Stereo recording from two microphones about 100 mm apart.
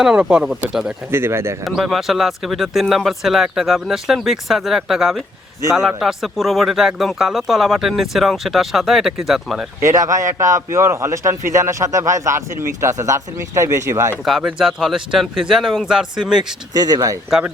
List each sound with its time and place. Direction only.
0.0 s speech: 10° right (ahead or behind)
1.1 s a man's voice: 25° right (ahead or behind)
1.6 s speech: centre (ahead or behind)
9.8 s a man's voice: 30° right (ahead or behind)
14.3 s speech: centre (ahead or behind)
16.7 s speech: 40° right (ahead or behind)